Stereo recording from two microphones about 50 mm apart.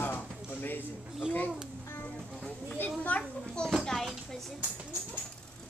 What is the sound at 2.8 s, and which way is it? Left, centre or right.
Children playing, left.